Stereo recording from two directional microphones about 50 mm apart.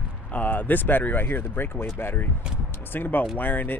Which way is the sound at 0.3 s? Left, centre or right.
Left.